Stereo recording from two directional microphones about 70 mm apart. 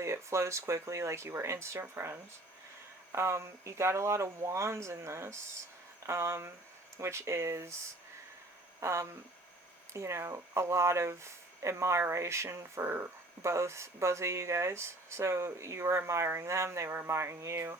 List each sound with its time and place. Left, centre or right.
0.0 s speech: right
8.8 s speech: right